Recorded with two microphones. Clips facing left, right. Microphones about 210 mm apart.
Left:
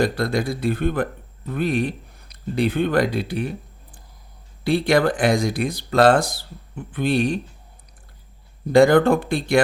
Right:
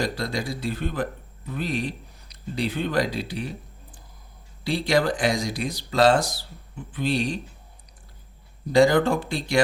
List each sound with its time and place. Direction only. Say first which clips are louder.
0.0 s a man's voice: left 6 dB; 55° left (ahead or behind)
4.6 s speech: left 4 dB; 55° left (ahead or behind)
8.7 s speech: left 4 dB; 55° left (ahead or behind)